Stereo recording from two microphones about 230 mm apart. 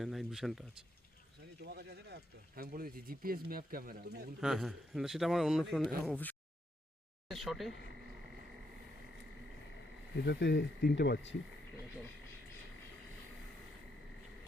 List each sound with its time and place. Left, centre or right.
0.0 s a man's voice: centre
1.6 s speech: right
4.4 s a man's voice: centre
7.3 s a sound: centre
10.2 s speech: left